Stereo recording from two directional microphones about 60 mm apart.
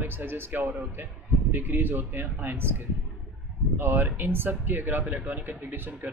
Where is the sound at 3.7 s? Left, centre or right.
Right.